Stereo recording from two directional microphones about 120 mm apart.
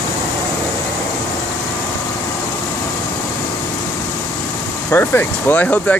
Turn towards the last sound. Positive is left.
turn(degrees=15)  # may be behind; listen again after turning